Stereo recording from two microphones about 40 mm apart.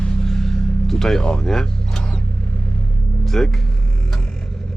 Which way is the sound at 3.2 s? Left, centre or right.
Centre.